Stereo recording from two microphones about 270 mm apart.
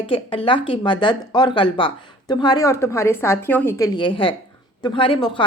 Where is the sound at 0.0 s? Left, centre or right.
Left.